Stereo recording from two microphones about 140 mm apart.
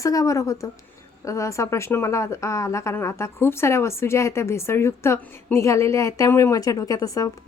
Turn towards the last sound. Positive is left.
turn(degrees=25)  # may be behind; listen again after turning